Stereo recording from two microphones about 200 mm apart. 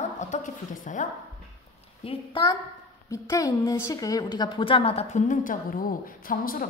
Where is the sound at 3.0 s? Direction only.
15° left (ahead or behind).